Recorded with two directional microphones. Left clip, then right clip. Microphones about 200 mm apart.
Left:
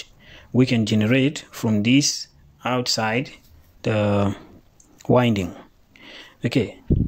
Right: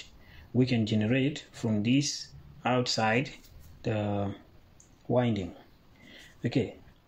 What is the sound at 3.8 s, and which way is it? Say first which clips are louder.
Speech: left 11 dB; 30° left (ahead or behind).